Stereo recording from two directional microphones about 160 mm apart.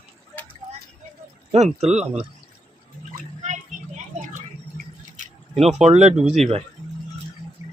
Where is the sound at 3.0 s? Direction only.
50° right (ahead or behind).